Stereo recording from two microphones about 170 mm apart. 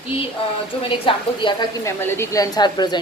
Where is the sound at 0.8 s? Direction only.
30° left (ahead or behind).